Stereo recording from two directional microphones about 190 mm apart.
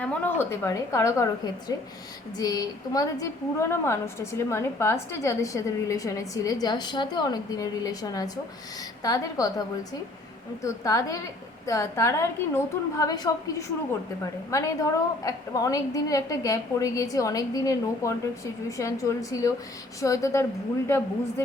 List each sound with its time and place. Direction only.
0.0 s a woman's voice: 10° left (ahead or behind)
10.6 s a woman's voice: 15° left (ahead or behind)